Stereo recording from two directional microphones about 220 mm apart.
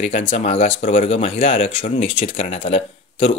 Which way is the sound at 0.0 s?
25° left (ahead or behind).